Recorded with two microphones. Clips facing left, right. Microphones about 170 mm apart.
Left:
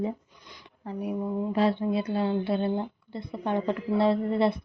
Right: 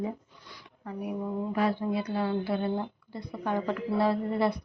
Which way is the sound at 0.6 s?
30° left (ahead or behind).